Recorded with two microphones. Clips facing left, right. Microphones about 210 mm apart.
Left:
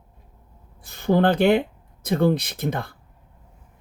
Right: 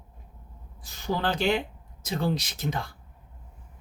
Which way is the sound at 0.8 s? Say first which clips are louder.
Left 10 dB; 55° left (ahead or behind).